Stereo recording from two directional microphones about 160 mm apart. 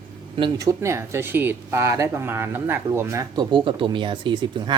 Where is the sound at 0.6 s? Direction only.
20° right (ahead or behind).